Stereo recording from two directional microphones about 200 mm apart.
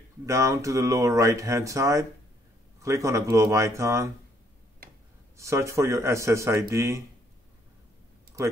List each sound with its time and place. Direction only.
0.3 s speech: 15° right (ahead or behind)
5.4 s speech: 15° right (ahead or behind)